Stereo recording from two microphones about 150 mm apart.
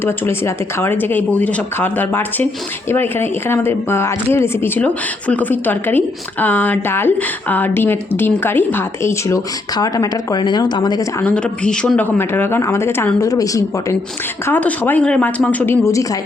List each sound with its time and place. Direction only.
0.0 s speech: 15° left (ahead or behind)
11.2 s speech: 10° left (ahead or behind)
14.4 s speech: 10° left (ahead or behind)